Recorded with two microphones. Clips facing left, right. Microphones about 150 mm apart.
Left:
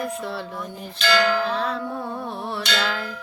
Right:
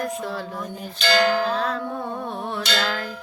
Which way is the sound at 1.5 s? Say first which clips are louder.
Right 1 dB; centre (ahead or behind).